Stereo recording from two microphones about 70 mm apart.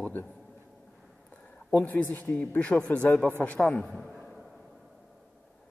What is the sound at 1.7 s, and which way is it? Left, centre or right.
Speech, left.